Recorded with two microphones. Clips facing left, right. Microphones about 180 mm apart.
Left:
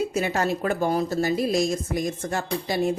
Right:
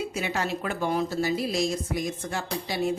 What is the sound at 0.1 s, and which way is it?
A woman's voice, 45° left (ahead or behind).